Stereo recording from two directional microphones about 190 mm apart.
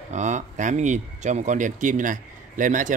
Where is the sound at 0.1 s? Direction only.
40° right (ahead or behind).